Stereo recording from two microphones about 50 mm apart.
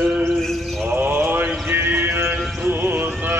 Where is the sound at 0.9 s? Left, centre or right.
Right.